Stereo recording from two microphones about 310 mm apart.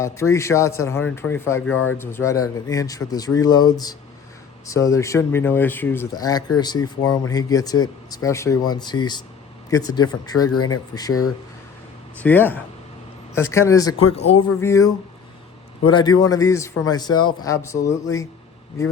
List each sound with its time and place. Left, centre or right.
0.0 s speech: centre
10.4 s speech: left
10.9 s speech: centre
12.2 s speech: centre
13.8 s speech: left
14.2 s speech: centre